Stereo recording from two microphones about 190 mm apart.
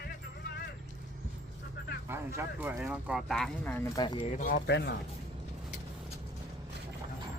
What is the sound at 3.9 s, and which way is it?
Speech, 25° left (ahead or behind).